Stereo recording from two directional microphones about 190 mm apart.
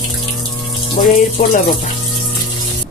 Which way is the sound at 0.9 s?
45° left (ahead or behind).